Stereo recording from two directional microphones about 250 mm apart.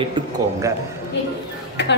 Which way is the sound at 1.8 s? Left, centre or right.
Left.